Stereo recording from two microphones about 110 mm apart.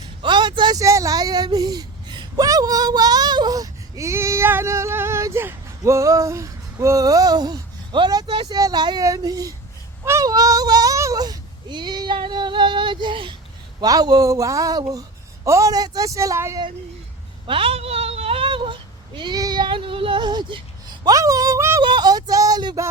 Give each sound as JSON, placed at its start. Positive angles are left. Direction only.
{"t": 0.2, "sound": "a sound", "side_deg": -45}
{"t": 0.8, "sound": "a woman's voice", "side_deg": -30}
{"t": 8.4, "sound": "speech", "side_deg": -35}
{"t": 13.8, "sound": "speech", "side_deg": -35}
{"t": 17.4, "sound": "speech", "side_deg": -55}
{"t": 21.0, "sound": "speech", "side_deg": -30}
{"t": 21.8, "sound": "speech", "side_deg": -40}